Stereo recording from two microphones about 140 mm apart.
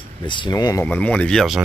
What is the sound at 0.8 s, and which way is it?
Speech, 10° left (ahead or behind).